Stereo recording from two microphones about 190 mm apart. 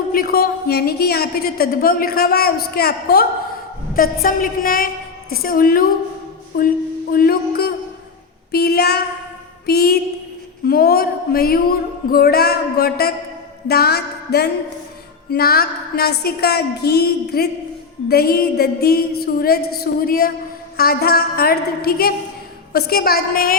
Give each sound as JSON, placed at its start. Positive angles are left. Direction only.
{"t": 0.1, "sound": "a woman's voice", "side_deg": 50}